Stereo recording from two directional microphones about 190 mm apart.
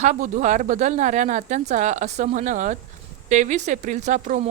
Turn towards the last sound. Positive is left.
turn(degrees=-40)  # may be behind; listen again after turning